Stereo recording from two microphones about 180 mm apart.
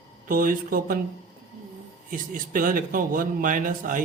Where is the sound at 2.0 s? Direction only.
50° right (ahead or behind).